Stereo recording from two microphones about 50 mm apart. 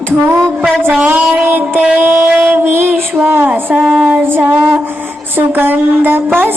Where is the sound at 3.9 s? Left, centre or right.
Right.